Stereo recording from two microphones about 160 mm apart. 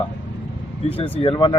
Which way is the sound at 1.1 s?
35° left (ahead or behind).